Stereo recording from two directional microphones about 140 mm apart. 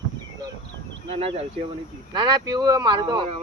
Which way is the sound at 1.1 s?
40° right (ahead or behind).